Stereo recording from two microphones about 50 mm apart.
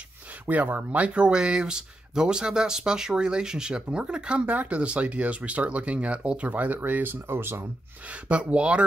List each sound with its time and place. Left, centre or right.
0.5 s speech: right
8.1 s speech: right